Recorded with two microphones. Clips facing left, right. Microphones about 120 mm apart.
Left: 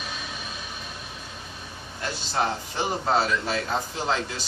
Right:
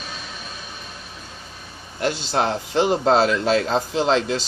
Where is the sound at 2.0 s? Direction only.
75° right (ahead or behind).